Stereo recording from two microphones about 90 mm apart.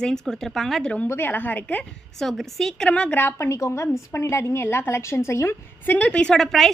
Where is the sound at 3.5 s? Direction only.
35° left (ahead or behind).